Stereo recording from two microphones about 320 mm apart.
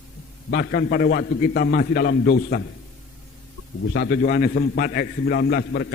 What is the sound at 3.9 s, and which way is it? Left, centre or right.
A man's voice, left.